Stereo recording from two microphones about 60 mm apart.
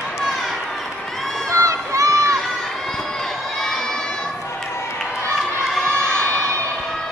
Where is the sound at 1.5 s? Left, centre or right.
Right.